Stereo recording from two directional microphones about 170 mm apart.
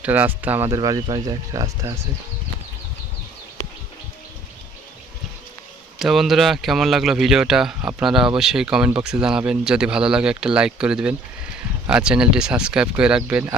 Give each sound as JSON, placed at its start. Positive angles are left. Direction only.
{"t": 0.0, "sound": "speech", "side_deg": -10}
{"t": 6.0, "sound": "speech", "side_deg": 0}